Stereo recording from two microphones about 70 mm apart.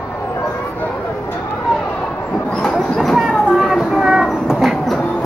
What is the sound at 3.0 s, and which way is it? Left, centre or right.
Train, centre.